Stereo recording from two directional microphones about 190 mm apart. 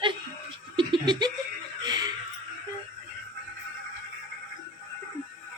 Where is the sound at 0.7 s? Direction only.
25° right (ahead or behind).